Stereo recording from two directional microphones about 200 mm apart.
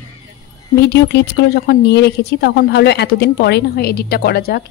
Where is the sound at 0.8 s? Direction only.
60° left (ahead or behind).